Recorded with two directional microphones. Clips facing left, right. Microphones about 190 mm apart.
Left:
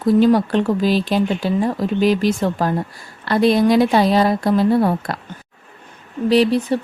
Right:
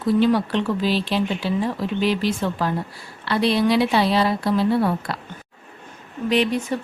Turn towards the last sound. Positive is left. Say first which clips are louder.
# left 6 dB
turn(degrees=35)  # may be behind; listen again after turning